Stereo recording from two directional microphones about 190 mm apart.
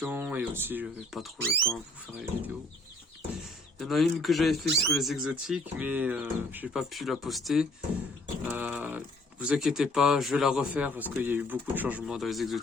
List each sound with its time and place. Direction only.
0.0 s speech: 10° right (ahead or behind)
3.8 s speech: centre (ahead or behind)